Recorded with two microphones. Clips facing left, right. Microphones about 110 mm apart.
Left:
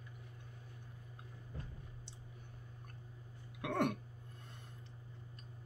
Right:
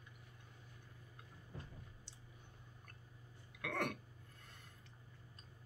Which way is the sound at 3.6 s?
20° left (ahead or behind).